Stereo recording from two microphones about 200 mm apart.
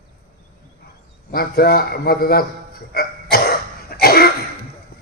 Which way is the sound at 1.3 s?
50° left (ahead or behind).